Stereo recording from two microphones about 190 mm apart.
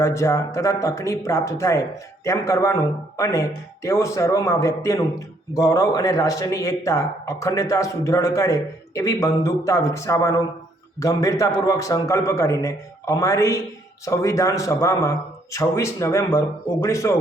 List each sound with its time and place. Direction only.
0.0 s a man's voice: 15° left (ahead or behind)